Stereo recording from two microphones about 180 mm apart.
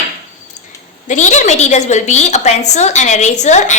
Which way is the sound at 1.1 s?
40° left (ahead or behind).